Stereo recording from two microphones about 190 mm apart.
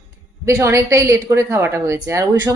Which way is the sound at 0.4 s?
15° right (ahead or behind).